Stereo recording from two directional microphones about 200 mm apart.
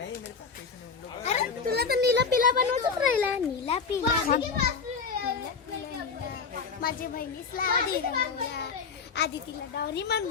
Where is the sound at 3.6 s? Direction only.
30° left (ahead or behind).